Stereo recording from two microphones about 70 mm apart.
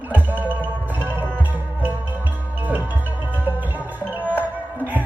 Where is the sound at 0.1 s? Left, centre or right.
Right.